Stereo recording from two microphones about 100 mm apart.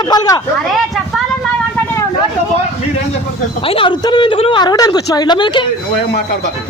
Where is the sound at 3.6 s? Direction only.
60° left (ahead or behind).